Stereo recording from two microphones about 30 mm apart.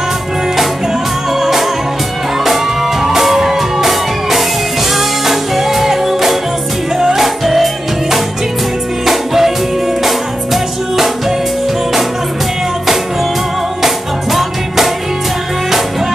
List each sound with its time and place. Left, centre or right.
1.4 s music: centre
7.4 s music: centre
13.8 s music: centre